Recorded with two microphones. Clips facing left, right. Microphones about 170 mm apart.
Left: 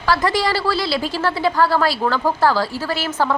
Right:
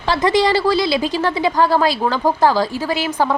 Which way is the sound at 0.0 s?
20° right (ahead or behind).